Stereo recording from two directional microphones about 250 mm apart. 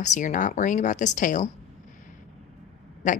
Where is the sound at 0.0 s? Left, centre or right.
Left.